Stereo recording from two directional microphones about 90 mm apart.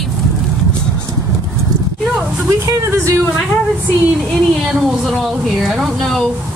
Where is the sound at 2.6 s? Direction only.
35° right (ahead or behind).